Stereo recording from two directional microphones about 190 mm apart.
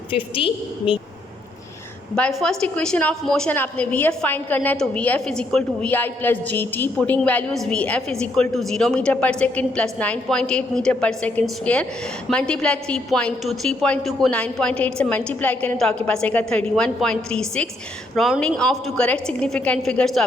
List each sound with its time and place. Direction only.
0.3 s a woman's voice: 30° left (ahead or behind)
2.1 s a woman's voice: 5° left (ahead or behind)